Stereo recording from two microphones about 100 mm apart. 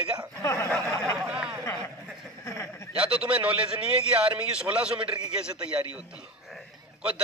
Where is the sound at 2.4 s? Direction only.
30° left (ahead or behind).